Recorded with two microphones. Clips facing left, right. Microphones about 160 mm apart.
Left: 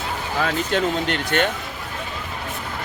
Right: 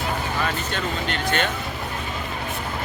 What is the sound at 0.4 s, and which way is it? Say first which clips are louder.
Speech: left 5 dB; 85° left.